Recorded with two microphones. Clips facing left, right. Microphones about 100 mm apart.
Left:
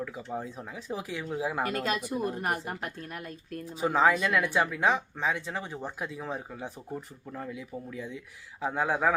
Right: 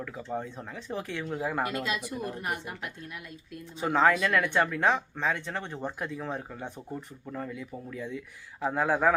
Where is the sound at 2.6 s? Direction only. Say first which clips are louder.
Left 3 dB; 45° left (ahead or behind).